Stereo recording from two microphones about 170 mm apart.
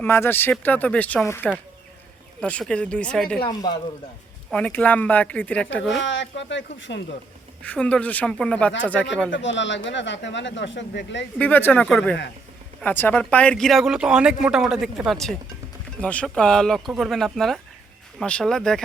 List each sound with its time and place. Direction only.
0.0 s speech: 15° left (ahead or behind)
3.4 s speech: 25° left (ahead or behind)
4.5 s speech: 5° left (ahead or behind)
6.0 s speech: 90° left
7.6 s speech: 5° left (ahead or behind)
9.3 s speech: 90° left
11.3 s speech: 10° left (ahead or behind)